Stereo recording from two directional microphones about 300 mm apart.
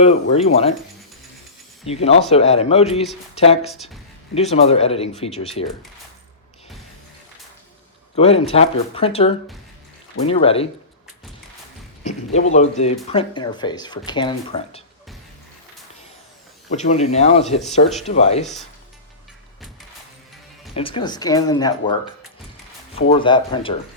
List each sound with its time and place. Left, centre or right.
0.0 s speech: left
1.8 s speech: centre
3.7 s speech: centre
4.4 s speech: left
8.1 s speech: centre
12.0 s speech: left
16.7 s speech: left
20.7 s speech: centre
23.0 s speech: centre